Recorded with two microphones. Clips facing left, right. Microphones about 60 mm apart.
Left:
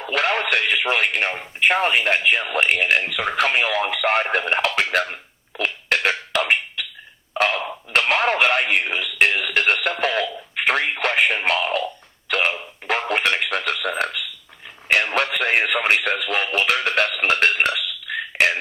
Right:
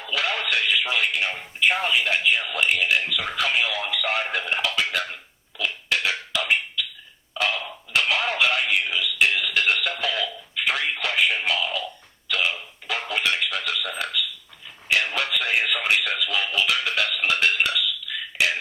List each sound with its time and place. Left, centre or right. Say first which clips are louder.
0.0 s speech: left 5 dB; left
4.7 s beatboxing: left 5 dB; left
7.3 s a sound: left 5 dB; left
14.8 s radio: left 4 dB; left